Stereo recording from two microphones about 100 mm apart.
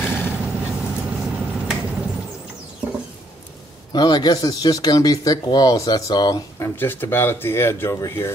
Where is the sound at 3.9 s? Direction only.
45° left (ahead or behind).